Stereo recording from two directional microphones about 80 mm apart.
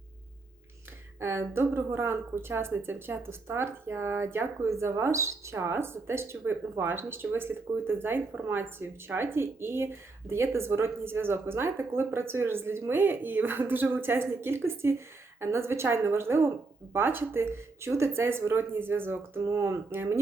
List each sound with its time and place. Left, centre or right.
1.2 s a woman's voice: right
19.4 s speech: right